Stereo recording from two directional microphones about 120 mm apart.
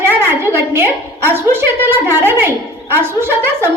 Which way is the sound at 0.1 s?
20° right (ahead or behind).